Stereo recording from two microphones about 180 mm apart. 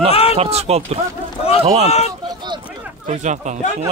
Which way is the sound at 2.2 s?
25° right (ahead or behind).